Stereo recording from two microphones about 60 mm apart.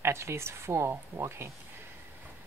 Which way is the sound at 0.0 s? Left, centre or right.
Right.